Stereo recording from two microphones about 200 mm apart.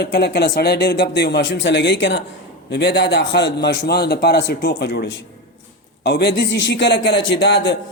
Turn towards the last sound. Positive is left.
turn(degrees=60)  # may be behind; listen again after turning